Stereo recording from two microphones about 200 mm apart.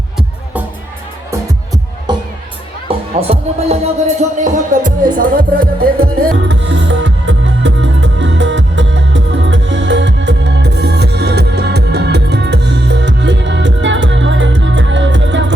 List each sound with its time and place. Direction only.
1.3 s music: 15° right (ahead or behind)
3.2 s speech: 30° right (ahead or behind); by 5.9 s 45° right (ahead or behind)
6.3 s music: 65° right (ahead or behind)